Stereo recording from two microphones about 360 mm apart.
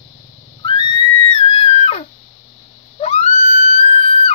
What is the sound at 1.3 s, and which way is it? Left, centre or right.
Screaming, centre.